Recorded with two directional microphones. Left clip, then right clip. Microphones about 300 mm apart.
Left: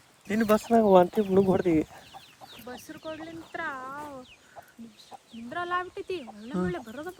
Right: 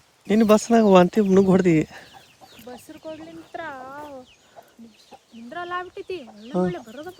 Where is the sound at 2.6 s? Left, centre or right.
Centre.